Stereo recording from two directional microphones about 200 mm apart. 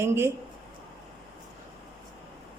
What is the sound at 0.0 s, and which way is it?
Speech, 15° right (ahead or behind).